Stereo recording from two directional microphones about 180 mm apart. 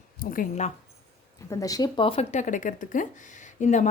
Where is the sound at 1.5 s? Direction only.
20° left (ahead or behind).